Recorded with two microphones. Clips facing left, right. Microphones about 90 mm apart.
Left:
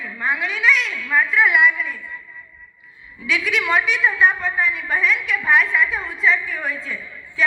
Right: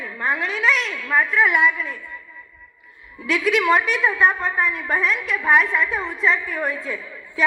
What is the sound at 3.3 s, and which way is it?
Speech, 40° right (ahead or behind).